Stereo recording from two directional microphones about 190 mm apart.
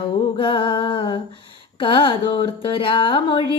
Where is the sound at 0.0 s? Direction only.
25° left (ahead or behind).